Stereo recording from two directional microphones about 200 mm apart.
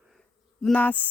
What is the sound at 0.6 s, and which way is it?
Insect, 5° left (ahead or behind).